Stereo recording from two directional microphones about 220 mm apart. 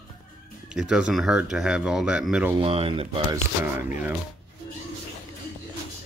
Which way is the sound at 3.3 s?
10° right (ahead or behind).